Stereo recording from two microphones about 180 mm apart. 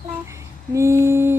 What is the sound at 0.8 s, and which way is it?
Speech, 15° right (ahead or behind).